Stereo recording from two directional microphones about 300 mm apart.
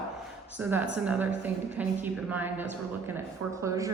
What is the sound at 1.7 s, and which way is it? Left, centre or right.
A woman's voice, centre.